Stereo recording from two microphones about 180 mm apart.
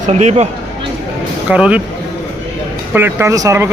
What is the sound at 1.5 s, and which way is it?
Speech, 5° right (ahead or behind).